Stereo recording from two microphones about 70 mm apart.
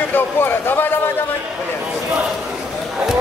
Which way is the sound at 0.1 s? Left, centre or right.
Left.